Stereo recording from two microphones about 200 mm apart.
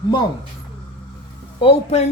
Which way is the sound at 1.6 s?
30° left (ahead or behind).